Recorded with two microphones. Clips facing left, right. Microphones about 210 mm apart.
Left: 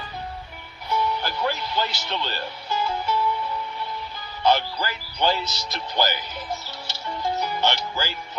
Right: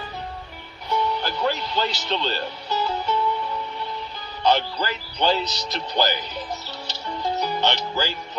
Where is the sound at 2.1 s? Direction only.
15° right (ahead or behind).